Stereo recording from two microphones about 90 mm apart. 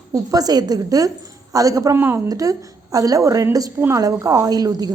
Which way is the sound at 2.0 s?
25° right (ahead or behind).